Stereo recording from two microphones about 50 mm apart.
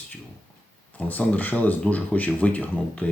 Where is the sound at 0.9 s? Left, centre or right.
Left.